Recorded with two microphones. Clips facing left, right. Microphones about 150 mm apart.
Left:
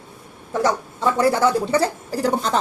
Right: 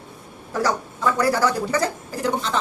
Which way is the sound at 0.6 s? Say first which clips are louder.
Left 2 dB; 25° left (ahead or behind).